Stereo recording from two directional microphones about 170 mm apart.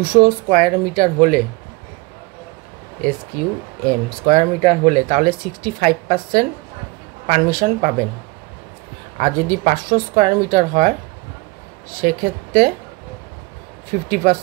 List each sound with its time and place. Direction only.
0.0 s speech: 60° right (ahead or behind)
3.8 s speech: 45° right (ahead or behind)
9.2 s speech: 50° right (ahead or behind)
11.9 s speech: 55° right (ahead or behind)
14.1 s speech: 55° right (ahead or behind)